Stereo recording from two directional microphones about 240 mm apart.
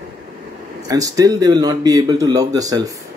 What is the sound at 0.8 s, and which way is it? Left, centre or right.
Speech, centre.